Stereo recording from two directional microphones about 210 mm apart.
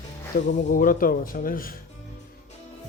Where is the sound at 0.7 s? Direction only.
40° left (ahead or behind).